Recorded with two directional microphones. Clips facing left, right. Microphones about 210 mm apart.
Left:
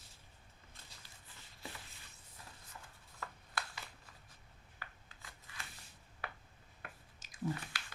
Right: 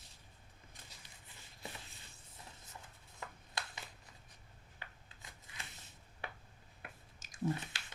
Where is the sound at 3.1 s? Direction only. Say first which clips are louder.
Left 1 dB; 20° right (ahead or behind).